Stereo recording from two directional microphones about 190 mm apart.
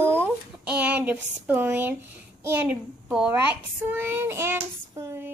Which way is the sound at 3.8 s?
10° right (ahead or behind).